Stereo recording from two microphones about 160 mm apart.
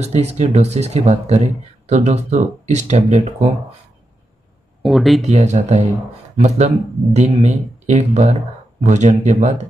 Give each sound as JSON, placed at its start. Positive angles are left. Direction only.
{"t": 0.0, "sound": "speech", "side_deg": -45}
{"t": 4.8, "sound": "speech", "side_deg": 0}
{"t": 5.2, "sound": "speech", "side_deg": -45}